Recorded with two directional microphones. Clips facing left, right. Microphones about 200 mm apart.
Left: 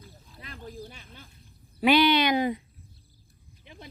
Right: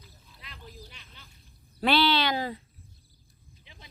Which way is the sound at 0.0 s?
50° left (ahead or behind).